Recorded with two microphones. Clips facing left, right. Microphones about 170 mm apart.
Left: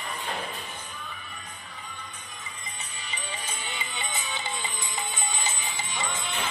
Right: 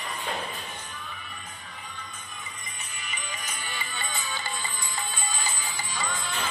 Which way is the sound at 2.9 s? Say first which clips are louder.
Left 1 dB; 30° left (ahead or behind).